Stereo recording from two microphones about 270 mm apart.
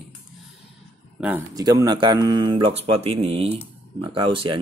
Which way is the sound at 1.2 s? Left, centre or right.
Centre.